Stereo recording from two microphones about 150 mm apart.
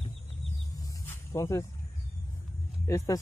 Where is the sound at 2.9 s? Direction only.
20° left (ahead or behind).